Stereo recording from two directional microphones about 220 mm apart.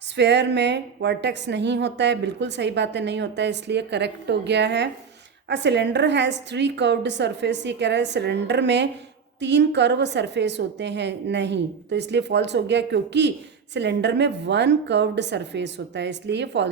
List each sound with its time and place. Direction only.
0.2 s a woman's voice: 50° right (ahead or behind)